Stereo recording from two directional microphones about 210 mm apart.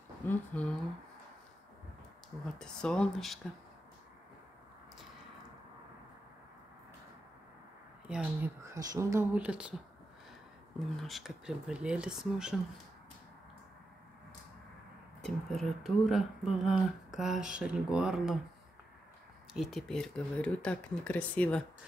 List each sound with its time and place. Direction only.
0.2 s speech: 10° left (ahead or behind)
2.6 s speech: 5° left (ahead or behind)
8.1 s speech: 5° right (ahead or behind)
10.8 s speech: centre (ahead or behind)
15.2 s speech: centre (ahead or behind)
19.5 s speech: centre (ahead or behind)